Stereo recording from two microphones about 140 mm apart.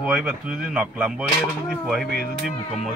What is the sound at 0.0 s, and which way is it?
Speech, 5° right (ahead or behind).